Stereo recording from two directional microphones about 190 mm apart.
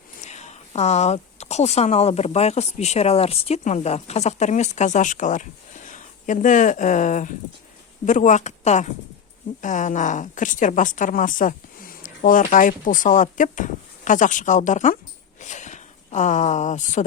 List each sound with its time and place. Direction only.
0.2 s speech: 35° left (ahead or behind)